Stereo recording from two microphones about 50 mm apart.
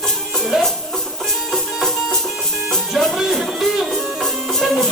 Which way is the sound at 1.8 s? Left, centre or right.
Centre.